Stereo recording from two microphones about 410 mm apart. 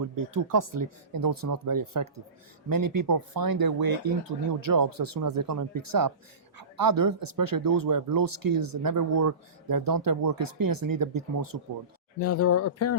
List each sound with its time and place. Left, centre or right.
0.0 s speech: right
12.2 s speech: left